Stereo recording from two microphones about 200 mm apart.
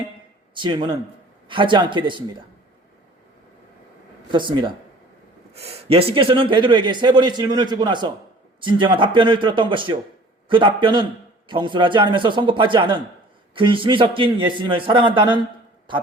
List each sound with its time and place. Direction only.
0.5 s speech: 25° right (ahead or behind)
4.3 s speech: 25° right (ahead or behind)